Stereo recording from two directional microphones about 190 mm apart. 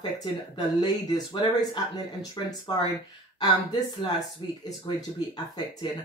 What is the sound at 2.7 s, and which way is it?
Speech, 25° left (ahead or behind).